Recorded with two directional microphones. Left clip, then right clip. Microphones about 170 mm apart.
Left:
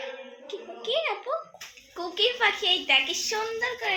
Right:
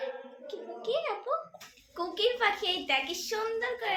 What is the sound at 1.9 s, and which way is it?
A woman's voice, 25° left (ahead or behind).